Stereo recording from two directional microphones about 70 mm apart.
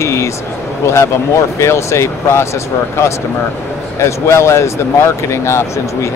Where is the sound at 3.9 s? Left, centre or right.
Left.